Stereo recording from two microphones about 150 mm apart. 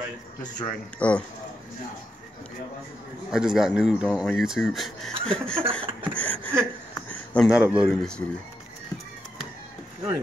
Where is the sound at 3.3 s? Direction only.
5° right (ahead or behind).